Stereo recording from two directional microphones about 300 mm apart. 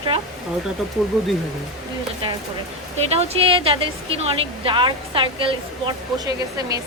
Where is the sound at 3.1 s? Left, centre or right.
Centre.